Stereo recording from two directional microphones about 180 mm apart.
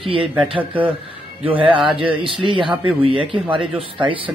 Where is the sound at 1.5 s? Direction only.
30° right (ahead or behind).